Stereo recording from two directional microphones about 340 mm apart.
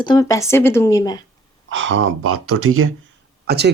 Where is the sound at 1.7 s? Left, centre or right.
Right.